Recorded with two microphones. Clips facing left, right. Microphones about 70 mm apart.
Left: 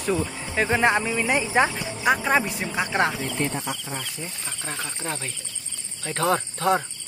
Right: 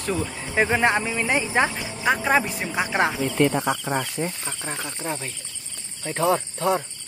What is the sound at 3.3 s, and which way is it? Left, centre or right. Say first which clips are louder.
Speech: right 7 dB; right.